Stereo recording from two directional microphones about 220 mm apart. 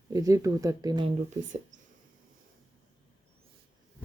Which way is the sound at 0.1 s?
15° right (ahead or behind).